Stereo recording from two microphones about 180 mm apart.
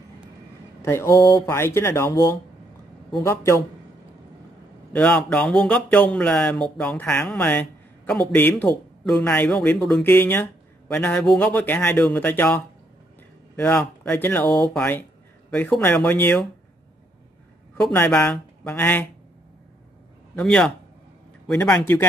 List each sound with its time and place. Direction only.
0.8 s a man's voice: 15° left (ahead or behind)
4.9 s a man's voice: 5° left (ahead or behind)
17.9 s a man's voice: 10° left (ahead or behind)
20.3 s a man's voice: 5° left (ahead or behind)